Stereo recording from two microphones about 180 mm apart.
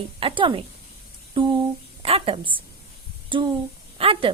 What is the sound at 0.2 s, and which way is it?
Speech, 30° right (ahead or behind).